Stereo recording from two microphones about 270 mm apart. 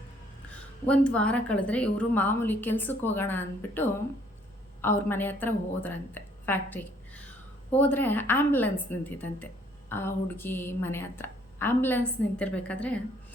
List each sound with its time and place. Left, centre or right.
0.9 s a woman's voice: centre